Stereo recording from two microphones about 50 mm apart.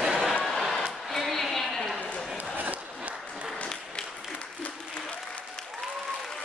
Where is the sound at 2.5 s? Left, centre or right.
Right.